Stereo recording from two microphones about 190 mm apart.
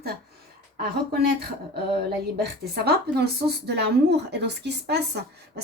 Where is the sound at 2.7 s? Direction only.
55° right (ahead or behind).